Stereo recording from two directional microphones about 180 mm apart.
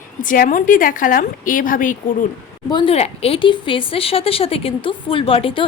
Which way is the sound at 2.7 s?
30° left (ahead or behind).